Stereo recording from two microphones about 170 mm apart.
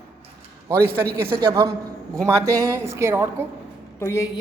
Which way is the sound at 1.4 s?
20° right (ahead or behind).